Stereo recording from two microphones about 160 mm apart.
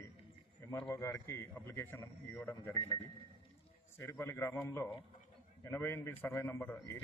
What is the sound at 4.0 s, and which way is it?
A man's voice, 15° left (ahead or behind).